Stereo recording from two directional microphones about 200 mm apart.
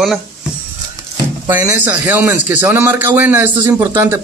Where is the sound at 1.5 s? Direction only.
10° right (ahead or behind).